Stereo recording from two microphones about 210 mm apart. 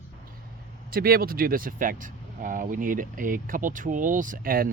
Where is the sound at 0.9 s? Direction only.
45° right (ahead or behind).